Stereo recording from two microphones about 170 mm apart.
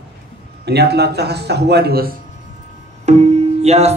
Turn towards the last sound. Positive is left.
turn(degrees=-40)  # may be behind; listen again after turning